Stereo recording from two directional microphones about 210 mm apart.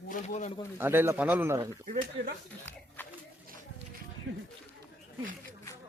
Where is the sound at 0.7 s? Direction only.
10° right (ahead or behind).